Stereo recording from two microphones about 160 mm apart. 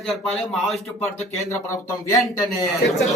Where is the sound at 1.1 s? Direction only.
20° left (ahead or behind).